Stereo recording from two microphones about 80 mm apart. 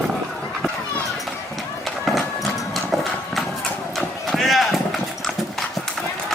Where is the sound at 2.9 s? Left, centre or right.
Centre.